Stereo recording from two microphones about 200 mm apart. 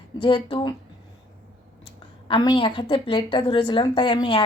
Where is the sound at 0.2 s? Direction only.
25° left (ahead or behind).